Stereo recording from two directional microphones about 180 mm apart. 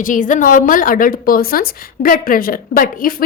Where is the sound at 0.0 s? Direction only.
45° left (ahead or behind).